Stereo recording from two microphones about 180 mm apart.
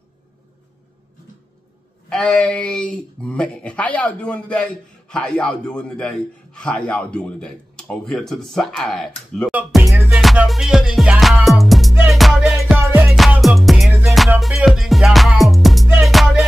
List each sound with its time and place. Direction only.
2.0 s speech: 5° left (ahead or behind)
9.5 s music: 5° right (ahead or behind)
12.7 s music: 10° right (ahead or behind)
13.1 s music: centre (ahead or behind)